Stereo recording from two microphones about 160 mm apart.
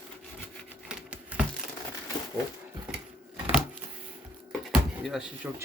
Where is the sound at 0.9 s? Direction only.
10° right (ahead or behind).